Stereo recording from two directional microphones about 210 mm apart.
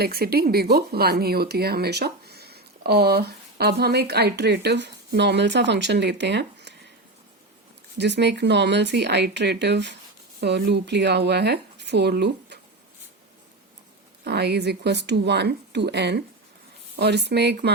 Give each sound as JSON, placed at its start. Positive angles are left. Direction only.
{"t": 0.0, "sound": "speech", "side_deg": -45}
{"t": 7.9, "sound": "speech", "side_deg": -55}
{"t": 14.3, "sound": "speech", "side_deg": -50}